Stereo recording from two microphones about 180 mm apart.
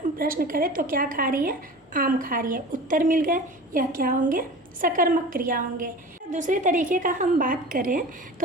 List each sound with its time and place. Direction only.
0.2 s a woman's voice: 50° right (ahead or behind)